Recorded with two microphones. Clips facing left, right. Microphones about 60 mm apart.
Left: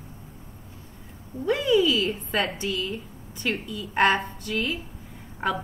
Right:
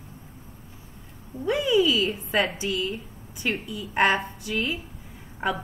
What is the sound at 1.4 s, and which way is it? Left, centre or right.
A woman's voice, centre.